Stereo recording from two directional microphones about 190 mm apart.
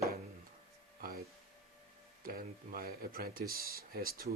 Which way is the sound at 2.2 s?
50° right (ahead or behind).